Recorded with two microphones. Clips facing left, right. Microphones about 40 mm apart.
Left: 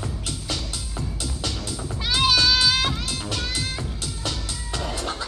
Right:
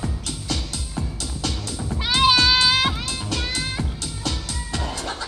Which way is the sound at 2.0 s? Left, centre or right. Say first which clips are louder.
Right 3 dB; centre.